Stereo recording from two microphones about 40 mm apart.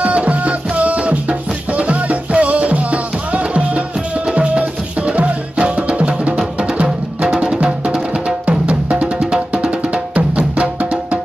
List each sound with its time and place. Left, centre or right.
0.0 s music: right
10.1 s music: right